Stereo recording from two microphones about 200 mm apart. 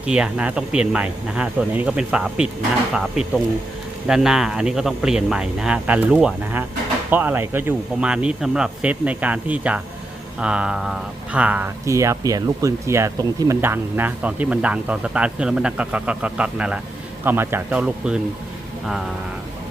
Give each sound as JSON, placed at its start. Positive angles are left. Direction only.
{"t": 0.0, "sound": "a man's voice", "side_deg": -5}